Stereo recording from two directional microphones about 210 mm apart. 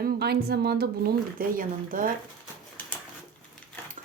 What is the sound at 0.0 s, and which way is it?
Speech, 50° right (ahead or behind).